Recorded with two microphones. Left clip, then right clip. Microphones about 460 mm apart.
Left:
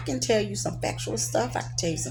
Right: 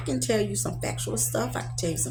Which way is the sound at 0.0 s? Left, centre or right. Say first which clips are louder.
Left 1 dB; right.